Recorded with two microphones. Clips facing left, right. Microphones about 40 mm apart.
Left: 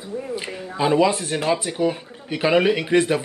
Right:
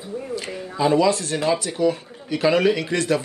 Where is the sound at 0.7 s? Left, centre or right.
Left.